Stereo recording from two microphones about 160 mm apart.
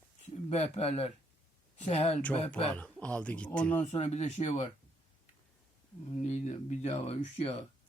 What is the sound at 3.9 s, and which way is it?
Speech, 45° left (ahead or behind).